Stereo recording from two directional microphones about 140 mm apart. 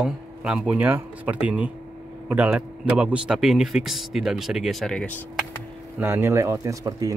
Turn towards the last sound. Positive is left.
turn(degrees=-25)  # may be behind; listen again after turning